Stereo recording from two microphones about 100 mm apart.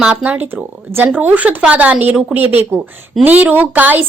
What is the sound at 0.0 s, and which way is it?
Speech, 10° right (ahead or behind).